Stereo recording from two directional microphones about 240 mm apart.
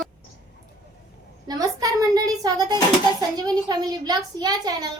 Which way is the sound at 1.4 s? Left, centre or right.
Centre.